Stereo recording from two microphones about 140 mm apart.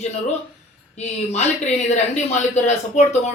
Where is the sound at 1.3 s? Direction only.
55° left (ahead or behind).